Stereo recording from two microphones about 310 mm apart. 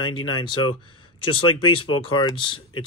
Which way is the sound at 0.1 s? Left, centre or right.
Centre.